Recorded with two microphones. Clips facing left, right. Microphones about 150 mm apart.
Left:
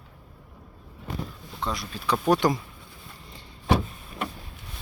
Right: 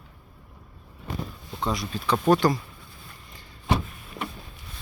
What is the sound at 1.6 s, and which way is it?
Speech, centre (ahead or behind).